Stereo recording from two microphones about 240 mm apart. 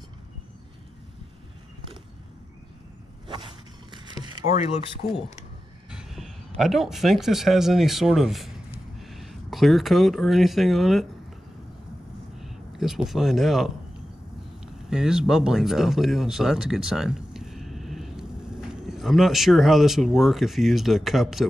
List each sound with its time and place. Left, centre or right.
3.9 s vehicle: centre
5.9 s speech: centre
12.4 s speech: centre
14.9 s speech: centre